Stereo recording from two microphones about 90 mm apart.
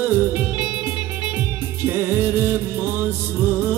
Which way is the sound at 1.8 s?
25° right (ahead or behind).